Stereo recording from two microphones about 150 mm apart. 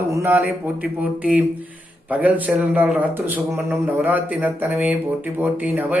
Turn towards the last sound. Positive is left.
turn(degrees=-10)  # may be behind; listen again after turning